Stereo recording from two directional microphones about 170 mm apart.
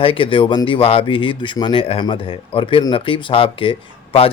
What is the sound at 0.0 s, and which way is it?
Speech, 30° left (ahead or behind).